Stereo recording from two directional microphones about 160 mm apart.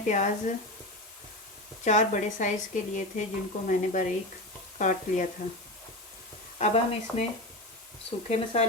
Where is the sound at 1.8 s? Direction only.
50° left (ahead or behind).